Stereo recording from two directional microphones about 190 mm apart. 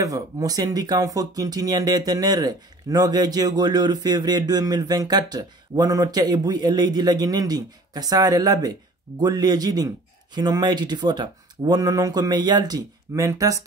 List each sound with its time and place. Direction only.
0.0 s speech: 20° right (ahead or behind)